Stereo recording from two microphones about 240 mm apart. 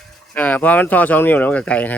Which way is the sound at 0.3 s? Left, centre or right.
Centre.